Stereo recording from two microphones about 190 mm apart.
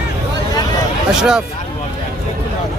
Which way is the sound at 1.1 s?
5° right (ahead or behind).